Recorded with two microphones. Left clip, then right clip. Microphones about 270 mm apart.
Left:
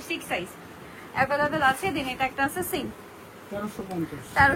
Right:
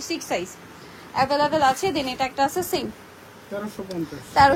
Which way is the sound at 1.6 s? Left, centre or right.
Centre.